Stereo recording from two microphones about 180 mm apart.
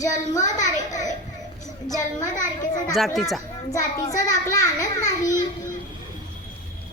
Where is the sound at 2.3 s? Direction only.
45° left (ahead or behind).